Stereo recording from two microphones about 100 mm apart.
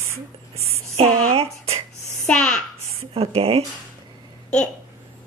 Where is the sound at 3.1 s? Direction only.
70° right (ahead or behind).